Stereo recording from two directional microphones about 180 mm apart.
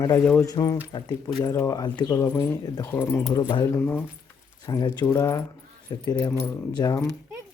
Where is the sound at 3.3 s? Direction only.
25° left (ahead or behind).